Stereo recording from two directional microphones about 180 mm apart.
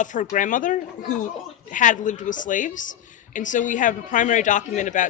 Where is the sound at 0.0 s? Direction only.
45° left (ahead or behind).